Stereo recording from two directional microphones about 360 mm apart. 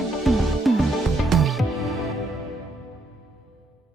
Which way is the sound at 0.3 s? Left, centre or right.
Centre.